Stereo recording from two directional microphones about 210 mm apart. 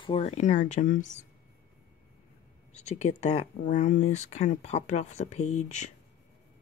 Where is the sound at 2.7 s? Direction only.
35° left (ahead or behind).